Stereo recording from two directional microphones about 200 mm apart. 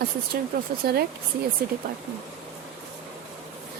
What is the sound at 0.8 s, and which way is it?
Speech, 50° right (ahead or behind).